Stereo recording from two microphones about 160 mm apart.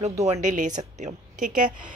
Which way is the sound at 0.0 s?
40° right (ahead or behind).